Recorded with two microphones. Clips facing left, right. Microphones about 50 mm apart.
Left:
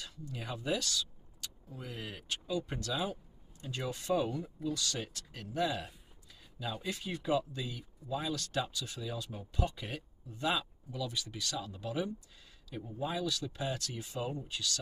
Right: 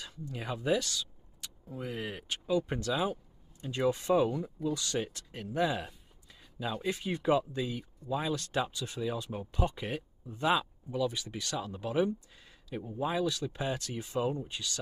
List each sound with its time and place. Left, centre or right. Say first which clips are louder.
0.0 s speech: right 3 dB; centre
6.8 s speech: right 5 dB; centre